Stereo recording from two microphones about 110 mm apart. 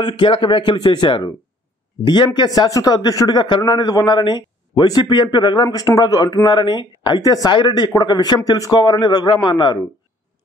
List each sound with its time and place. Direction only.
0.0 s speech: 45° left (ahead or behind)
7.2 s speech: 35° left (ahead or behind)
8.7 s speech: 45° left (ahead or behind)